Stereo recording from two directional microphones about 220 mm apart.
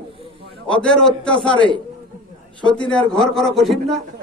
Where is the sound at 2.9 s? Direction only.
Centre (ahead or behind).